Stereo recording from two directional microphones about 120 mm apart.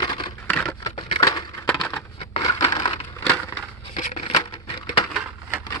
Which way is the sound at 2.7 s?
40° left (ahead or behind).